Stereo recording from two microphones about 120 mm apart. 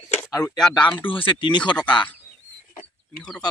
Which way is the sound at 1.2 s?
40° left (ahead or behind).